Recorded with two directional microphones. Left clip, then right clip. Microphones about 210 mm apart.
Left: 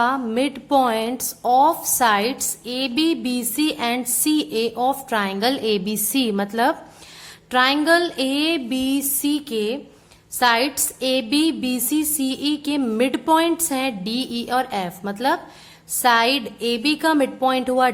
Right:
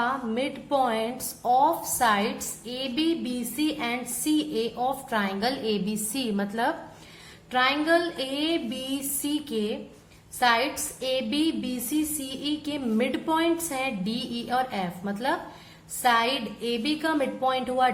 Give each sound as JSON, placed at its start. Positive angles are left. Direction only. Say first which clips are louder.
{"t": 0.0, "sound": "a woman's voice", "louder": "left 7 dB", "side_deg": 40}